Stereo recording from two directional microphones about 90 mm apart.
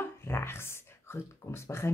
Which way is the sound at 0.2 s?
25° left (ahead or behind).